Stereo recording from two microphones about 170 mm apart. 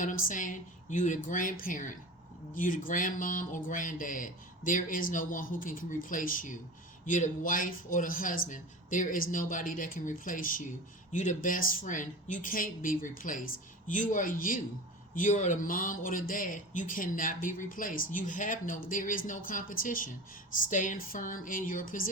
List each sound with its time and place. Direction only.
0.0 s a man's voice: 50° left (ahead or behind)